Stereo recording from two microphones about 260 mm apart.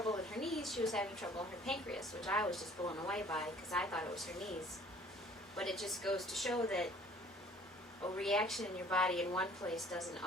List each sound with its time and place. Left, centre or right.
0.3 s a sound: centre
1.6 s a woman's voice: centre
2.8 s speech: centre
3.1 s a woman's voice: centre
5.5 s a woman's voice: centre
8.1 s a woman's voice: centre